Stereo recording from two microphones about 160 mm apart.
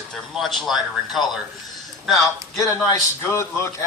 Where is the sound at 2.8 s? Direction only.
15° left (ahead or behind).